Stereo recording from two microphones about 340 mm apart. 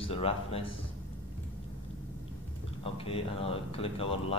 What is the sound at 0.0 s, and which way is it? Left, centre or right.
Speech, centre.